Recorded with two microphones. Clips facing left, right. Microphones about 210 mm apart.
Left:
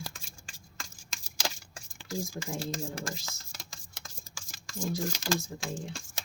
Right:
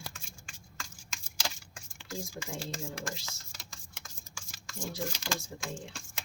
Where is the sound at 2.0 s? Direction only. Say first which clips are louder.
Left 4 dB; 40° left (ahead or behind).